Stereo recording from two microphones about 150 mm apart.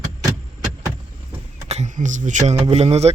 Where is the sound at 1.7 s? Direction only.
50° right (ahead or behind).